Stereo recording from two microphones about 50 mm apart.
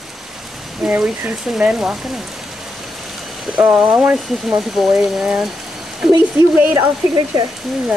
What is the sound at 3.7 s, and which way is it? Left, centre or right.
Speech, right.